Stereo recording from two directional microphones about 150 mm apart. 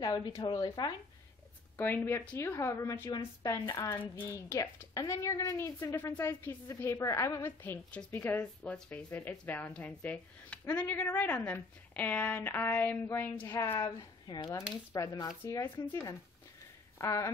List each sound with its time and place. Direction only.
0.0 s a woman's voice: 25° left (ahead or behind)